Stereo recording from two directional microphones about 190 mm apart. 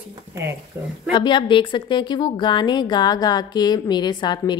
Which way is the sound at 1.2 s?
25° left (ahead or behind).